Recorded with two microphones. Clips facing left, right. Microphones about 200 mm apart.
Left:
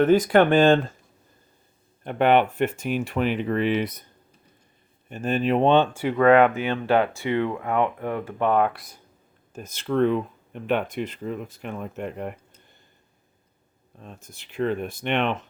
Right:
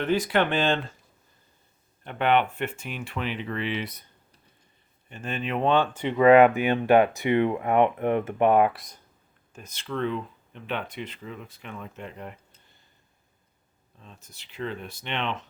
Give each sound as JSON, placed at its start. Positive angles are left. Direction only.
{"t": 0.0, "sound": "speech", "side_deg": 50}
{"t": 2.0, "sound": "speech", "side_deg": 45}
{"t": 5.0, "sound": "speech", "side_deg": 40}
{"t": 5.9, "sound": "speech", "side_deg": 10}
{"t": 6.1, "sound": "speech", "side_deg": -10}
{"t": 8.7, "sound": "speech", "side_deg": 0}
{"t": 9.5, "sound": "speech", "side_deg": 45}
{"t": 14.0, "sound": "speech", "side_deg": 55}